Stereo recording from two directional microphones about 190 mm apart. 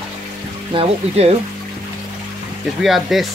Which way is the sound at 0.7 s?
30° right (ahead or behind).